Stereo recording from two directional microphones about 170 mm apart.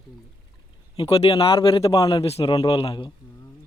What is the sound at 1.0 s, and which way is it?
Speech, 35° left (ahead or behind).